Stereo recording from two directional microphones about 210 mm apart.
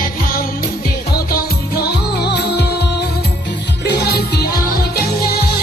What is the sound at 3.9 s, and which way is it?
Music, 50° left (ahead or behind).